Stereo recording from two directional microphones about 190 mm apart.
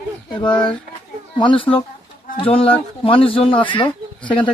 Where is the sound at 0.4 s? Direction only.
25° left (ahead or behind).